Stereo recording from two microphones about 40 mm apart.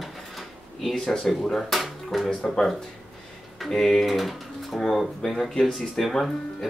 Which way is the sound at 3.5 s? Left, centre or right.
Centre.